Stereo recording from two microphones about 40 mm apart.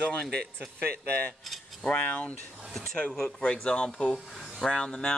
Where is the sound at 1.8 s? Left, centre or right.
Left.